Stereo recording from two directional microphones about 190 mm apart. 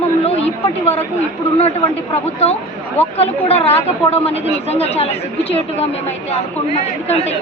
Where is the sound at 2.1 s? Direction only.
35° left (ahead or behind).